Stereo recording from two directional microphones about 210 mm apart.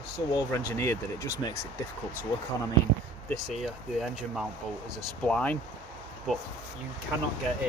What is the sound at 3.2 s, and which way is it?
Speech, centre (ahead or behind).